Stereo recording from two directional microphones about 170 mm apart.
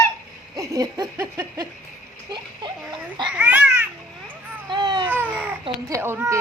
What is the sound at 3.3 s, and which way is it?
Babbling, 10° right (ahead or behind).